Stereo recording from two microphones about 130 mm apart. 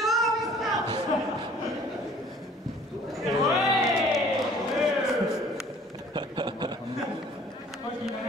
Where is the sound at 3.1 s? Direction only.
Centre (ahead or behind).